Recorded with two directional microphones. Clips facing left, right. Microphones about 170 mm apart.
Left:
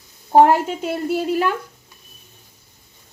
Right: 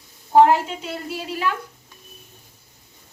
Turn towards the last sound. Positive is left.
turn(degrees=50)  # may be behind; listen again after turning